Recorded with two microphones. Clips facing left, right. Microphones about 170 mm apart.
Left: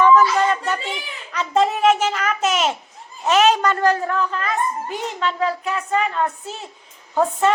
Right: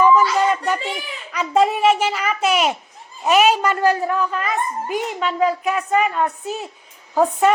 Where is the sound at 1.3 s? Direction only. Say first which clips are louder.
Right 2 dB; 10° right (ahead or behind).